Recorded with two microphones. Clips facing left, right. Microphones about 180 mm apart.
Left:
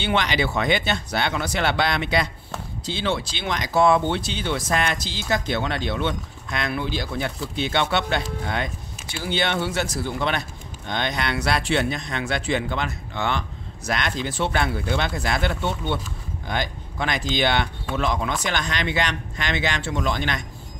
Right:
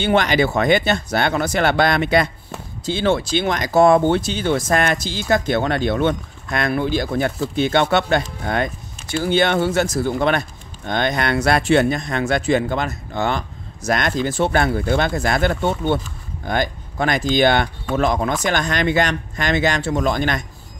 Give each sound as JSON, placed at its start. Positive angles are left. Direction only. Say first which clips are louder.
{"t": 0.0, "sound": "speech", "louder": "right 6 dB", "side_deg": -45}